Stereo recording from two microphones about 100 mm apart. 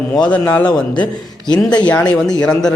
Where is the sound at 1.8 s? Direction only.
15° left (ahead or behind).